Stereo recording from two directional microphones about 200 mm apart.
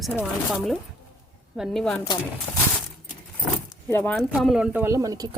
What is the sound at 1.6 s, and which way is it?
Speech, 5° left (ahead or behind).